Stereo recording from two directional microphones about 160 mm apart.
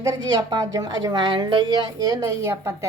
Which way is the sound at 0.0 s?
20° right (ahead or behind).